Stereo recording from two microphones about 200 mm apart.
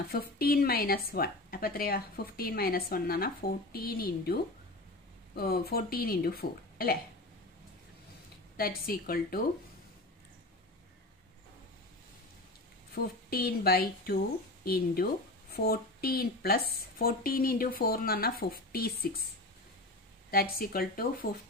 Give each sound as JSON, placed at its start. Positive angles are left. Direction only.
{"t": 0.1, "sound": "a woman's voice", "side_deg": 50}
{"t": 8.5, "sound": "a woman's voice", "side_deg": 50}
{"t": 12.9, "sound": "a woman's voice", "side_deg": 50}
{"t": 20.2, "sound": "a woman's voice", "side_deg": 50}